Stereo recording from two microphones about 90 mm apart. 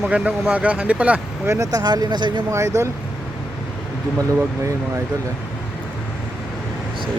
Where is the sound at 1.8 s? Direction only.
50° right (ahead or behind).